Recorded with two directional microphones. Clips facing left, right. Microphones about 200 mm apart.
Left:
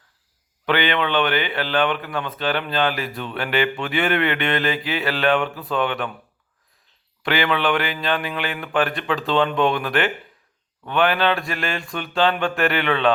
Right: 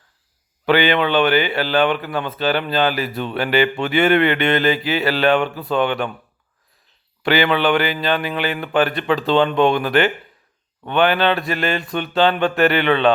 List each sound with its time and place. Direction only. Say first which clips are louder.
0.6 s a man's voice: right 5 dB; 5° right (ahead or behind)
7.2 s speech: right 4 dB; centre (ahead or behind)